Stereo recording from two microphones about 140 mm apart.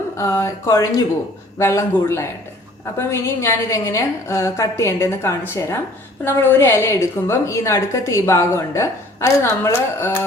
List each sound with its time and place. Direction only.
0.2 s a woman's voice: 20° left (ahead or behind)